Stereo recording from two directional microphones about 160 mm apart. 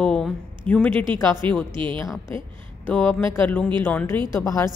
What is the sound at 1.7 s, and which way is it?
Speech, 30° right (ahead or behind).